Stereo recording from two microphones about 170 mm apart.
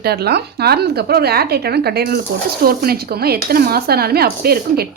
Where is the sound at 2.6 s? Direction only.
60° right (ahead or behind).